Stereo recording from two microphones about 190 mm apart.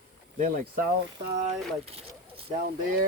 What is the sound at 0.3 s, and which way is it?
Speech, 45° right (ahead or behind).